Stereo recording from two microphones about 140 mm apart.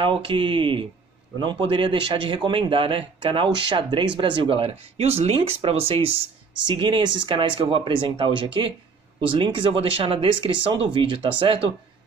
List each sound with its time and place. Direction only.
0.0 s a man's voice: 35° right (ahead or behind)